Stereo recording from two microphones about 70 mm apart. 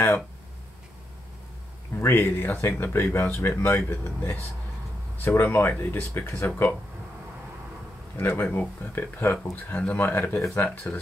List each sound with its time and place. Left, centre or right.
2.0 s speech: left
8.2 s speech: left
8.5 s speech: left